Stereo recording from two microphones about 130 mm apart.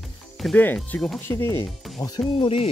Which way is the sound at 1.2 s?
15° left (ahead or behind).